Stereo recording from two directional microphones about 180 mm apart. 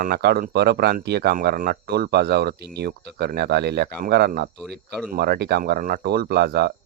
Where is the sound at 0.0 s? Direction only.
60° right (ahead or behind).